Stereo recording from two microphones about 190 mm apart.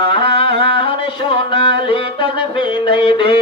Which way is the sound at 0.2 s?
25° left (ahead or behind).